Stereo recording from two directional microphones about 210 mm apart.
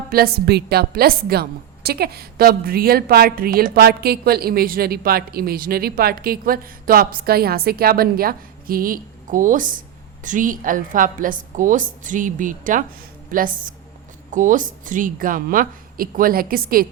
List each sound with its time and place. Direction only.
0.1 s a woman's voice: 45° right (ahead or behind)